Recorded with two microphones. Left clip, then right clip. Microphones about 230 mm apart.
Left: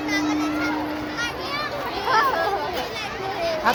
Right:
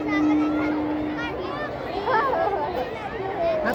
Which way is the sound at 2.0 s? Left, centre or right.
Left.